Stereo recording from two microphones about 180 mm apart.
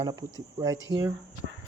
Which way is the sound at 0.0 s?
20° right (ahead or behind).